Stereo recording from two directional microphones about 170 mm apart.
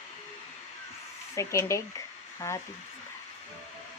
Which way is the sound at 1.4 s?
15° left (ahead or behind).